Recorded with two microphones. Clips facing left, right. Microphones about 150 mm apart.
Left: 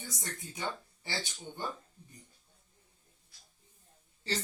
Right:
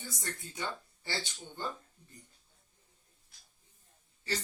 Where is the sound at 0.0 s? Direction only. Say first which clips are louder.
Right 1 dB; 20° left (ahead or behind).